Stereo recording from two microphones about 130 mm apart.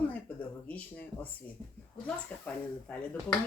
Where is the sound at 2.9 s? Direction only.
10° left (ahead or behind).